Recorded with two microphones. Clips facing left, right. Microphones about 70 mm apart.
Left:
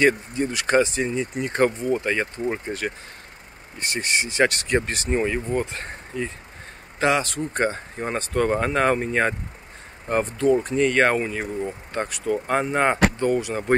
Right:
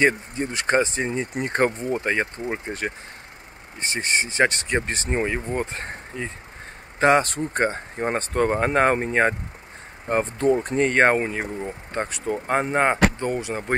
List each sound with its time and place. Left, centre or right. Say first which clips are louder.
0.0 s speech: left 1 dB; right
2.4 s speech: left 2 dB; centre
3.8 s speech: even; right
7.0 s speech: right 3 dB; right